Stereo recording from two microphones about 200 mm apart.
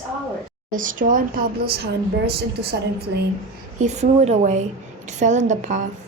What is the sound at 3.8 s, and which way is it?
A woman's voice, 35° right (ahead or behind).